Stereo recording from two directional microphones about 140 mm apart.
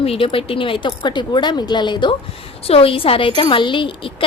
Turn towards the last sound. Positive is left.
turn(degrees=35)  # may be behind; listen again after turning